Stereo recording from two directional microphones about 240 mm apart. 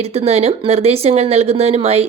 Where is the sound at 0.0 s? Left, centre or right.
Right.